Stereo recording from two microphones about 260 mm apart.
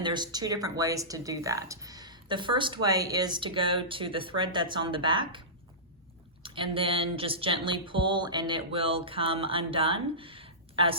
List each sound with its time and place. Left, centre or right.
0.0 s speech: centre
6.4 s speech: centre